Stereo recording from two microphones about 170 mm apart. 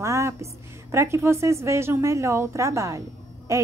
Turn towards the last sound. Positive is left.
turn(degrees=-20)  # may be behind; listen again after turning